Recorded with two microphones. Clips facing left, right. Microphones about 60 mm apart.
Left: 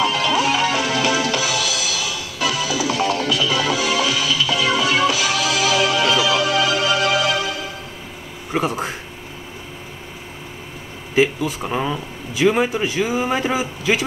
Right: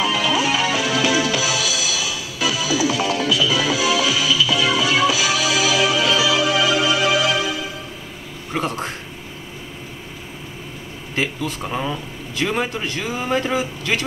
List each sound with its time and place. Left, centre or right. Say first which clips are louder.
0.0 s music: left 1 dB; left
8.5 s speech: left 2 dB; centre
11.1 s speech: left 6 dB; centre